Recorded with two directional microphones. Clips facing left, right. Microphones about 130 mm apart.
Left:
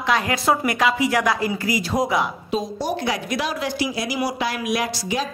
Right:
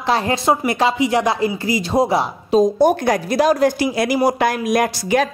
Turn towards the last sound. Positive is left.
turn(degrees=-55)  # may be behind; listen again after turning